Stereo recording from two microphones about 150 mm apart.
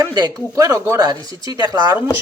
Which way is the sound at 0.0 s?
25° right (ahead or behind).